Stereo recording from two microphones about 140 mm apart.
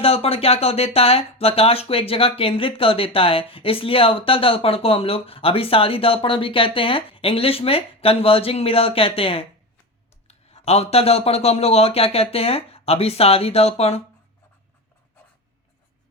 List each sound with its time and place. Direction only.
0.0 s speech: 45° left (ahead or behind)